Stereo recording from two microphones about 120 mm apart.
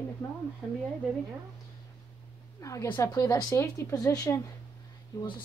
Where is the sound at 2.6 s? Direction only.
25° left (ahead or behind).